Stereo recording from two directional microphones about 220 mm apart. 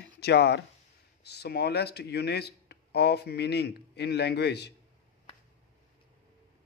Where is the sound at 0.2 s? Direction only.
50° left (ahead or behind).